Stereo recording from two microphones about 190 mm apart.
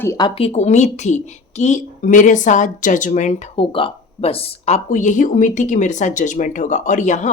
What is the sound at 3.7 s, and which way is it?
Speech, 30° left (ahead or behind).